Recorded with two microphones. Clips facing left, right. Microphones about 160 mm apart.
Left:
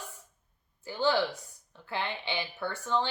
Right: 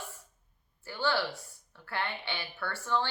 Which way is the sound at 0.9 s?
20° left (ahead or behind).